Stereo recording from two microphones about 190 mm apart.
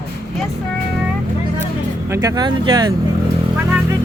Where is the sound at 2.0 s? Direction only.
15° right (ahead or behind).